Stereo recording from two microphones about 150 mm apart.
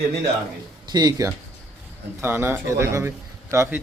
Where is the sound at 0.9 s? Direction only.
25° right (ahead or behind).